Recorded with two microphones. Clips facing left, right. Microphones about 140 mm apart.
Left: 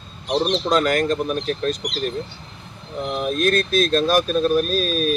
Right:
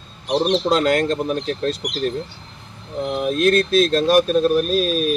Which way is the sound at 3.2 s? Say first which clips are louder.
Right 3 dB; 25° right (ahead or behind).